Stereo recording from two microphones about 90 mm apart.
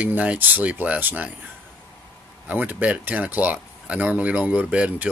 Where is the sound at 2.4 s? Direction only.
20° right (ahead or behind).